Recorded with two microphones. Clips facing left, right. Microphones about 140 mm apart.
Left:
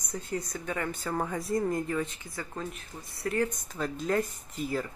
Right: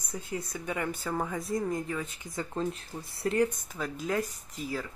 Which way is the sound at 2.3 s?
25° right (ahead or behind).